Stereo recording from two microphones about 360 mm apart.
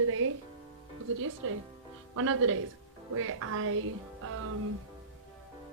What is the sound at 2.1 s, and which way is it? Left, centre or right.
A woman's voice, right.